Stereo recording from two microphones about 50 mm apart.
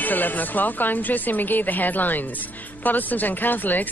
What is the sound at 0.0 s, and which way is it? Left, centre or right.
Speech, left.